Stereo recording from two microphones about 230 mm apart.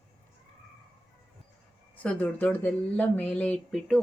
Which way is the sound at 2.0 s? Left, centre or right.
Centre.